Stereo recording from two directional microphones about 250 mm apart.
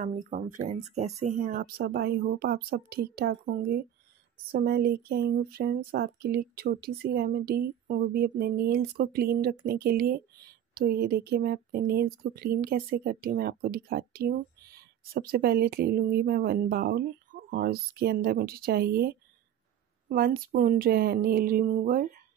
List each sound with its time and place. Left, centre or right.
0.0 s speech: right